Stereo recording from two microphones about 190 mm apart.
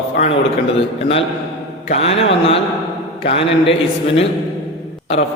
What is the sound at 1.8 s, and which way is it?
A man's voice, 35° left (ahead or behind).